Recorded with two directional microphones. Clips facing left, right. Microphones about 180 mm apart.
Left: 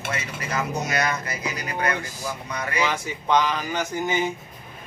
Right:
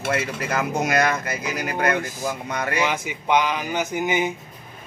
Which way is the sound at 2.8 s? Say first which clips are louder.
Right 1 dB; 15° right (ahead or behind).